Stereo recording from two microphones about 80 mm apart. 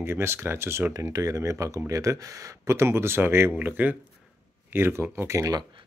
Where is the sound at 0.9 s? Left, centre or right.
Right.